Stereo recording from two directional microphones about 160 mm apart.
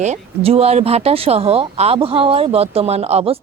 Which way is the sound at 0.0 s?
40° right (ahead or behind).